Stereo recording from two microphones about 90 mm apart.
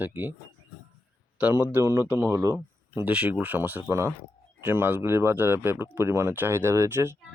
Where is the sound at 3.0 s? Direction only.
15° right (ahead or behind).